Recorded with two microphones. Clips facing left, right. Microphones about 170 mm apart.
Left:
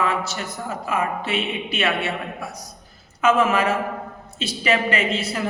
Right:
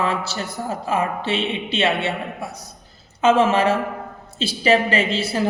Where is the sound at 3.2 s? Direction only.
25° right (ahead or behind).